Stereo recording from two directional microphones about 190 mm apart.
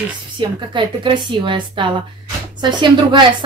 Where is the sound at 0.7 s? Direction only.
25° right (ahead or behind).